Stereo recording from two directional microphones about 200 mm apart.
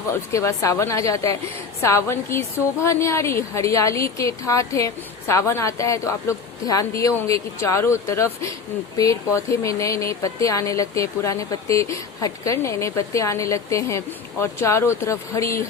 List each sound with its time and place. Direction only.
0.1 s speech: 15° left (ahead or behind)